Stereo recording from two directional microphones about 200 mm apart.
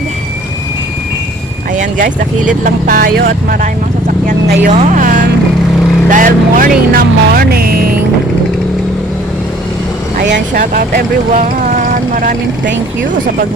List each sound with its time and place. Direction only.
2.6 s speech: 45° right (ahead or behind)
4.4 s speech: 35° right (ahead or behind)
10.2 s speech: 55° right (ahead or behind); by 12.4 s 40° right (ahead or behind)